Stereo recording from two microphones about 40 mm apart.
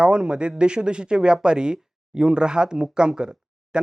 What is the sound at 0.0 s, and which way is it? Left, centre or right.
Speech, right.